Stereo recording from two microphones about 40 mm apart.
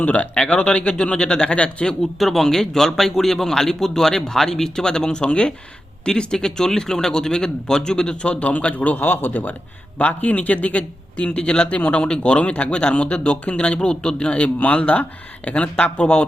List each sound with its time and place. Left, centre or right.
0.0 s speech: left
0.3 s a man's voice: left
2.0 s a man's voice: centre; by 9.0 s left
9.0 s a man's voice: left